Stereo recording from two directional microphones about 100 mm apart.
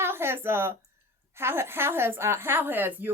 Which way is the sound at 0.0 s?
25° right (ahead or behind).